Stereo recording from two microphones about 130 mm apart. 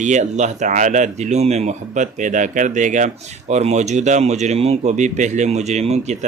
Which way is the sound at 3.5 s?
60° right (ahead or behind).